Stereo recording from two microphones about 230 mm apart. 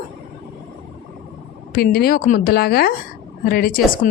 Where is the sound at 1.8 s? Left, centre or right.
Left.